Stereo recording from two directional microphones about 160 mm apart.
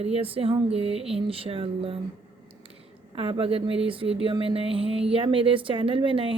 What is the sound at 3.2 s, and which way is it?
Speech, 35° right (ahead or behind).